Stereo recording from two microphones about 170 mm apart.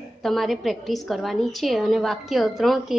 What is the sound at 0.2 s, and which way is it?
A woman's voice, centre (ahead or behind).